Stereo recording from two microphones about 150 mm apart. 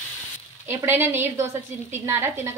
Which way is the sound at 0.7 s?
15° right (ahead or behind).